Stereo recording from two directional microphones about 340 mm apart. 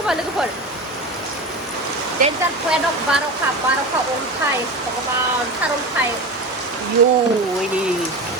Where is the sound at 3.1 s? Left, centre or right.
Centre.